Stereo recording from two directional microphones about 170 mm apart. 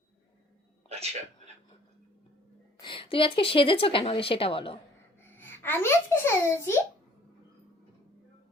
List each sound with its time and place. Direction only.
0.9 s music: 40° right (ahead or behind)
2.7 s speech: 30° left (ahead or behind)
5.2 s a child's voice: 10° left (ahead or behind)